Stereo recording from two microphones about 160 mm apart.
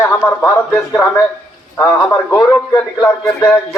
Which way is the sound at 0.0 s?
10° left (ahead or behind).